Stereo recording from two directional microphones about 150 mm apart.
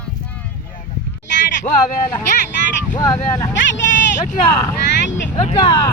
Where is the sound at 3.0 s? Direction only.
20° left (ahead or behind).